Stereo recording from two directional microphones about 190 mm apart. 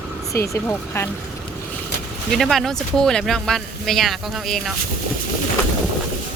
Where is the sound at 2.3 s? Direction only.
Centre (ahead or behind).